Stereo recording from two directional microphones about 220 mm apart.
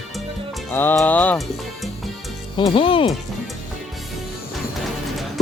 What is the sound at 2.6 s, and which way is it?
Speech, 25° left (ahead or behind).